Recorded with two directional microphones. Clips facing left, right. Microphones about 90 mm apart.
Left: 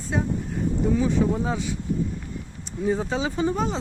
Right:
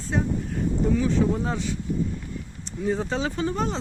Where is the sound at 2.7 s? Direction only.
5° left (ahead or behind).